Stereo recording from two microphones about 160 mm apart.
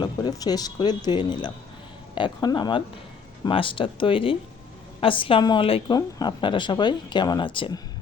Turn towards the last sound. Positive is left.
turn(degrees=30)  # may be behind; listen again after turning